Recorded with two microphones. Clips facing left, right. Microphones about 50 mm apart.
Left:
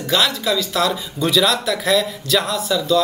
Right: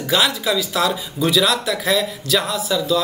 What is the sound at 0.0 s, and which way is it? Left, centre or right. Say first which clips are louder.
Speech: even; centre.